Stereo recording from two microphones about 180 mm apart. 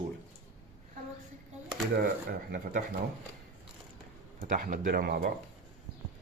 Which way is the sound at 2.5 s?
50° right (ahead or behind).